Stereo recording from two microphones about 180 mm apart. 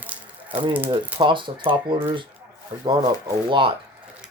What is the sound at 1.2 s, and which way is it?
Speech, 25° right (ahead or behind).